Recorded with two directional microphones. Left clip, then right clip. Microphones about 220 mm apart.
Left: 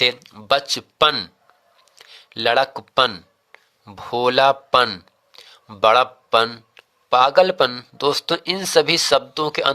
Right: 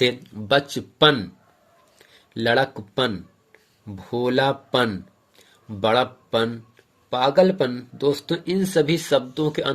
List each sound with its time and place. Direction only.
0.0 s speech: 35° left (ahead or behind)